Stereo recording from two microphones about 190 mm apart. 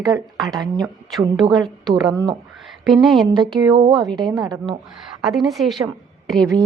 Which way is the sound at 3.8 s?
20° right (ahead or behind).